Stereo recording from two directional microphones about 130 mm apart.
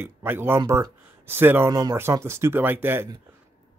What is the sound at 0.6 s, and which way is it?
Speech, 30° right (ahead or behind).